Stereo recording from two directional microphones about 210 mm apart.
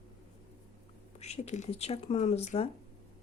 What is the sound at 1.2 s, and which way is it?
Speech, 30° left (ahead or behind).